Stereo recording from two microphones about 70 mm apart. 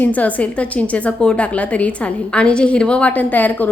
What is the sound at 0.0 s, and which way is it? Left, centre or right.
A woman's voice, left.